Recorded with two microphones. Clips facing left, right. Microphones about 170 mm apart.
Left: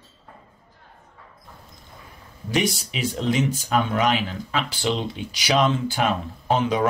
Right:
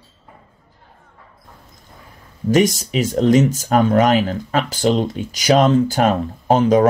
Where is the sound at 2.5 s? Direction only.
45° right (ahead or behind).